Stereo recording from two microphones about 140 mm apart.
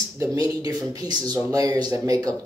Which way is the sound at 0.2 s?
25° right (ahead or behind).